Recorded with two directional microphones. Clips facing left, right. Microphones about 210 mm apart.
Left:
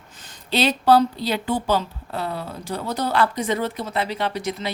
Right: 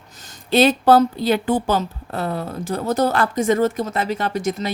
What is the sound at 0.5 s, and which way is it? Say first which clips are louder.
A woman's voice: right 4 dB; 50° right (ahead or behind).